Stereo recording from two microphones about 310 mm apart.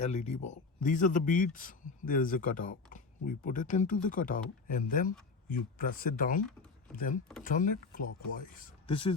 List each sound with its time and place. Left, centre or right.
0.0 s speech: left